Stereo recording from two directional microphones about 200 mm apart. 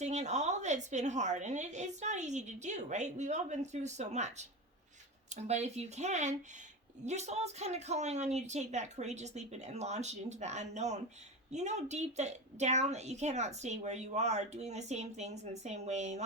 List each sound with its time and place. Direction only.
0.0 s a woman's voice: 35° right (ahead or behind)